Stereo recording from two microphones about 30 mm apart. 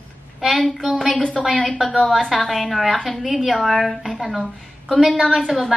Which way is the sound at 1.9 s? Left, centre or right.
Left.